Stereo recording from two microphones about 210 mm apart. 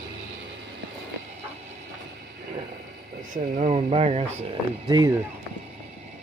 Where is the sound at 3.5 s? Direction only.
30° right (ahead or behind).